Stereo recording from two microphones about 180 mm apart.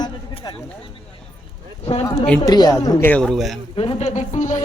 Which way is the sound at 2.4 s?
20° left (ahead or behind).